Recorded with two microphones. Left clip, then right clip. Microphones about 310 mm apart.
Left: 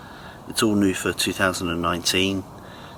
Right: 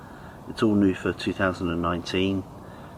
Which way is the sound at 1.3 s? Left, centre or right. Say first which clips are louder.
Even; centre.